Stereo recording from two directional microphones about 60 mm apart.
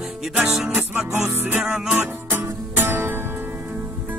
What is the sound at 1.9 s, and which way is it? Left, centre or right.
Music, right.